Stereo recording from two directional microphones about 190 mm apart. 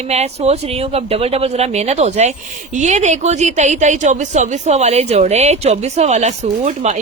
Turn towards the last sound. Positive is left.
turn(degrees=-35)  # may be behind; listen again after turning